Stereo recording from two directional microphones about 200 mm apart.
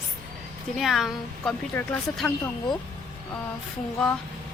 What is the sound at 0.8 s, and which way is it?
A woman's voice, centre (ahead or behind).